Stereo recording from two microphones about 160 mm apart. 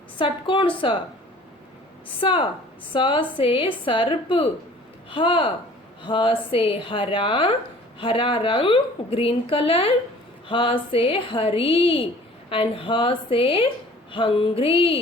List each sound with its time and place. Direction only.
0.2 s a woman's voice: 30° left (ahead or behind)
2.2 s a woman's voice: 30° left (ahead or behind)